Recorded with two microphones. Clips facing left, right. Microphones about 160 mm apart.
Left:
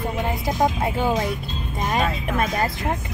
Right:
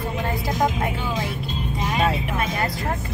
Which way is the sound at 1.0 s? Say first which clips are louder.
Left 5 dB; 45° left (ahead or behind).